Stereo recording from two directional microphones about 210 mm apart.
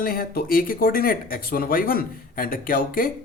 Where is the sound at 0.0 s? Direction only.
45° left (ahead or behind).